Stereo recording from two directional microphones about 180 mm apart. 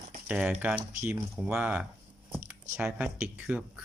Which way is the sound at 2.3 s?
10° right (ahead or behind).